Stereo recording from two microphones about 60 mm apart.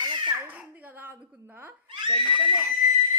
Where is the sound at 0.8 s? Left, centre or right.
Right.